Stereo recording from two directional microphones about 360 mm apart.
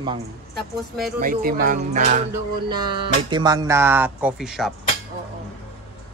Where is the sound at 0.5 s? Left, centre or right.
Centre.